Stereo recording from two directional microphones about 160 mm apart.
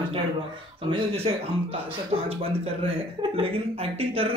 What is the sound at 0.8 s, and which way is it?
Speech, 35° right (ahead or behind).